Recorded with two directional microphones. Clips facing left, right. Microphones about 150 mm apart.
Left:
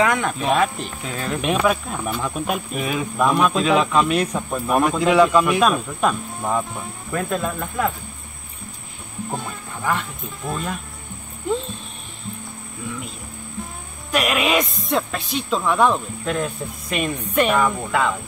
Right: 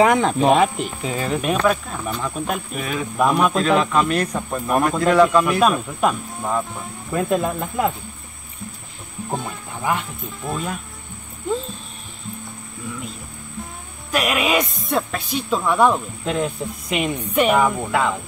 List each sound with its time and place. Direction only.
0.0 s speech: 25° right (ahead or behind); by 3.1 s 5° left (ahead or behind)
3.2 s speech: 5° right (ahead or behind)
7.1 s speech: 20° right (ahead or behind)
9.8 s speech: 15° right (ahead or behind)
10.4 s speech: centre (ahead or behind)
14.1 s speech: centre (ahead or behind)